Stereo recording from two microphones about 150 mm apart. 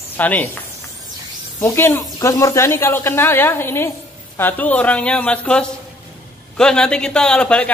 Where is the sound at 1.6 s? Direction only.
15° left (ahead or behind).